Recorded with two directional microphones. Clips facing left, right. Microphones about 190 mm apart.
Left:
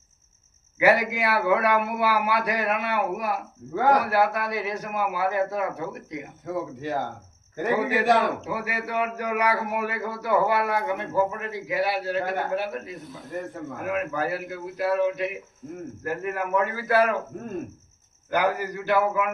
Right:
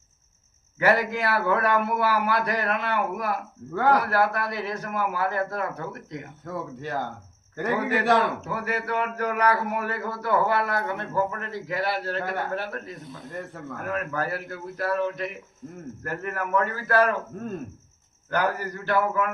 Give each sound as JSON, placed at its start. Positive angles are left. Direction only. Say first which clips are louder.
{"t": 0.8, "sound": "speech", "louder": "left 2 dB", "side_deg": 10}
{"t": 7.5, "sound": "speech", "louder": "left 1 dB", "side_deg": 15}
{"t": 18.3, "sound": "speech", "louder": "left 2 dB", "side_deg": 10}